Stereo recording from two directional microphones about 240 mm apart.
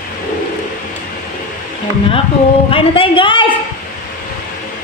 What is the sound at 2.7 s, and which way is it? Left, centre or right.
Speech, left.